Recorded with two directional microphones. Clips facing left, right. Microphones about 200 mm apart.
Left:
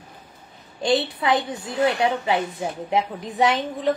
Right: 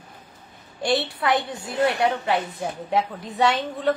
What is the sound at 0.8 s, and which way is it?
A woman's voice, 20° left (ahead or behind).